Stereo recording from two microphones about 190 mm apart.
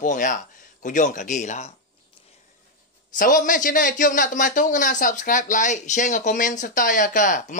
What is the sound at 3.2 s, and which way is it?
A man's voice, 45° left (ahead or behind).